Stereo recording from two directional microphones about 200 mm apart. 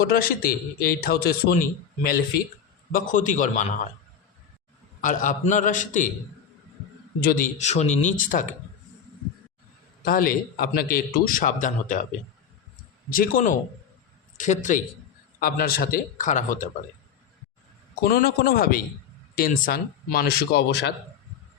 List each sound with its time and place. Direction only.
0.0 s a man's voice: 50° left (ahead or behind)
2.9 s speech: 40° left (ahead or behind)
4.9 s speech: 40° left (ahead or behind)
7.2 s speech: 45° left (ahead or behind)
10.0 s a man's voice: 45° left (ahead or behind)
13.1 s a man's voice: 45° left (ahead or behind)
18.0 s a man's voice: 50° left (ahead or behind)